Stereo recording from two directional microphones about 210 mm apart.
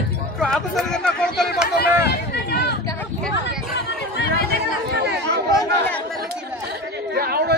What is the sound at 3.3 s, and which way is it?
Hubbub, 50° left (ahead or behind).